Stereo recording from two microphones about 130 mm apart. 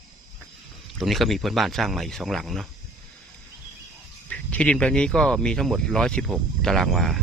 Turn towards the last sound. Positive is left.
turn(degrees=0)  # may be behind; listen again after turning